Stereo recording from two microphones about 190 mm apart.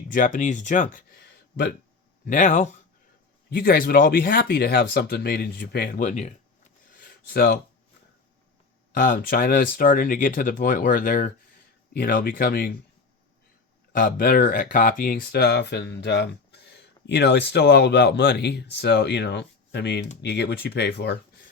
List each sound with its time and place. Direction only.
0.1 s speech: 45° left (ahead or behind)
2.2 s speech: 45° left (ahead or behind)
6.9 s a sound: 50° left (ahead or behind)
9.0 s speech: 50° left (ahead or behind)
13.9 s speech: 50° left (ahead or behind)